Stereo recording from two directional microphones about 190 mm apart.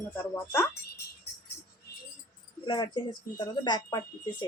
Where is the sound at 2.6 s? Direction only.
25° left (ahead or behind).